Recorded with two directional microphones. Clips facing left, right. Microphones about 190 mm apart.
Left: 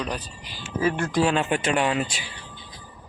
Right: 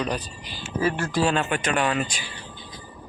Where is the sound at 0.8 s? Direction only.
15° left (ahead or behind).